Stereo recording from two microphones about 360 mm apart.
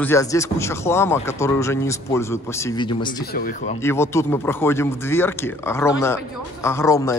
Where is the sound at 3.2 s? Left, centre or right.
Left.